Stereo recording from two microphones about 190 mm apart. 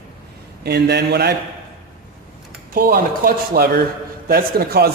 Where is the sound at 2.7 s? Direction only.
50° right (ahead or behind).